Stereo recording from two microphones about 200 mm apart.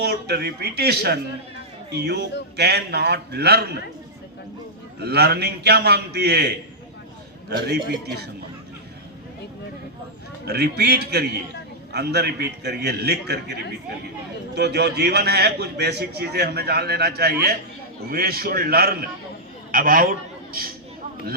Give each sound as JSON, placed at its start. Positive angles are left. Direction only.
{"t": 0.0, "sound": "a man's voice", "side_deg": -55}
{"t": 5.0, "sound": "a man's voice", "side_deg": -55}
{"t": 7.5, "sound": "a man's voice", "side_deg": -55}
{"t": 10.4, "sound": "a man's voice", "side_deg": -55}
{"t": 14.5, "sound": "a man's voice", "side_deg": -55}